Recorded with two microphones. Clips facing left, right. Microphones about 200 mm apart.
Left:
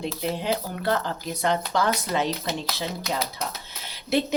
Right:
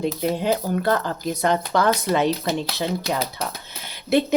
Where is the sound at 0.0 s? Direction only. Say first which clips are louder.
Right 5 dB; 45° right (ahead or behind).